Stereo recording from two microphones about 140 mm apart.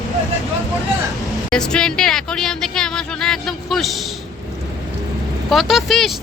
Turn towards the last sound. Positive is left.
turn(degrees=0)  # may be behind; listen again after turning